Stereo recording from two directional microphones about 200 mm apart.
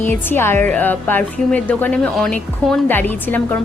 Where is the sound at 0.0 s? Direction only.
10° left (ahead or behind).